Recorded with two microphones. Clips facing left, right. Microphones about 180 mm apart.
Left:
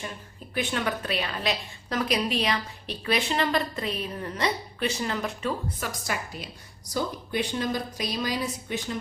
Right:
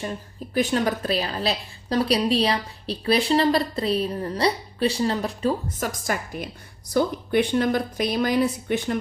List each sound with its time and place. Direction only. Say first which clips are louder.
0.5 s a woman's voice: right 6 dB; 40° right (ahead or behind); by 9.0 s 60° right (ahead or behind)